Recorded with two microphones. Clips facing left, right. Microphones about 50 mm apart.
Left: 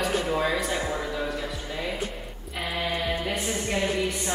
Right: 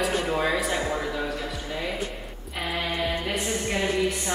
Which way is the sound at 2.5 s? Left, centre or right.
Centre.